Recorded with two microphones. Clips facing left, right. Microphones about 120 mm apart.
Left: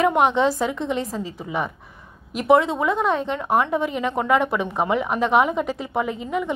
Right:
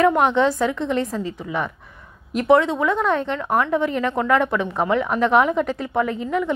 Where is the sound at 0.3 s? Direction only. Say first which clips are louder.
Right 2 dB; 30° left (ahead or behind).